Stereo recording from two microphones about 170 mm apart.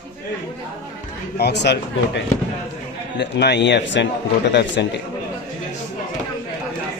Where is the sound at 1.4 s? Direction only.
80° left.